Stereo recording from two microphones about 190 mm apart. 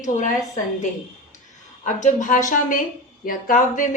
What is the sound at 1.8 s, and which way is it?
A woman's voice, 40° left (ahead or behind).